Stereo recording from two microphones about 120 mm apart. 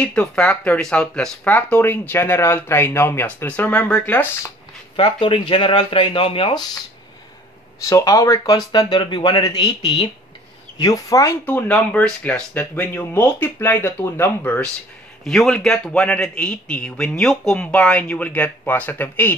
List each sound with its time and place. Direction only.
0.0 s speech: 10° left (ahead or behind)
4.9 s speech: 45° left (ahead or behind)
7.9 s speech: 30° left (ahead or behind)
11.4 s speech: 15° left (ahead or behind)
15.2 s speech: 5° left (ahead or behind)